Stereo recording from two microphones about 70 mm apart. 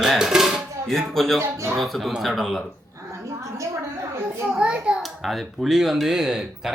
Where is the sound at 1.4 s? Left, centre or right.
Right.